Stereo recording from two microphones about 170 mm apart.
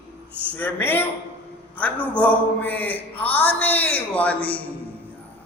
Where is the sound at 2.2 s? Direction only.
10° left (ahead or behind).